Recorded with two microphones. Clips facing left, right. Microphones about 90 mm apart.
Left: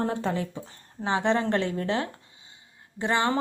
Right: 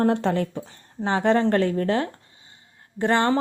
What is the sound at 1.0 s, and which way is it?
A woman's voice, 45° right (ahead or behind).